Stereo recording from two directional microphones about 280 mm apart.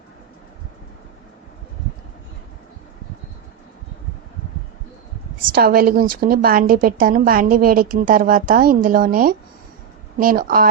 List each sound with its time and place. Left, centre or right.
5.5 s a woman's voice: right